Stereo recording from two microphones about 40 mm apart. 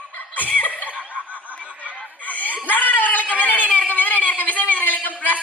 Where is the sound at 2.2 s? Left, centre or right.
Left.